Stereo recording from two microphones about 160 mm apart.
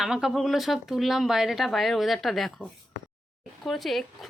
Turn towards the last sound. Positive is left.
turn(degrees=0)  # may be behind; listen again after turning